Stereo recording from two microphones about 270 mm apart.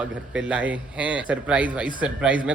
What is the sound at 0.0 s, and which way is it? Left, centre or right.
A man's voice, centre.